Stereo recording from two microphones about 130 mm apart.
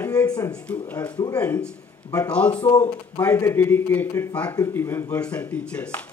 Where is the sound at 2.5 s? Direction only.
35° left (ahead or behind).